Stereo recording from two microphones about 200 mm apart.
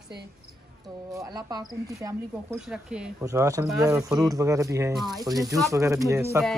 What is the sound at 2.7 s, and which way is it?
Speech, 5° right (ahead or behind).